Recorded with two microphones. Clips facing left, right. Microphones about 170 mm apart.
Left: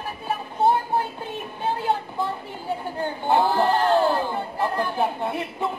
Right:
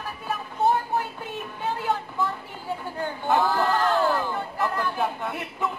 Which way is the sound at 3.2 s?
25° left (ahead or behind).